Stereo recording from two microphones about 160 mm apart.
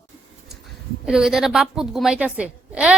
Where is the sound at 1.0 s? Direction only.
5° right (ahead or behind).